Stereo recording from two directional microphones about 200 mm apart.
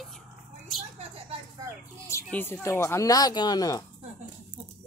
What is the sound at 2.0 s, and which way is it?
Speech, 10° left (ahead or behind).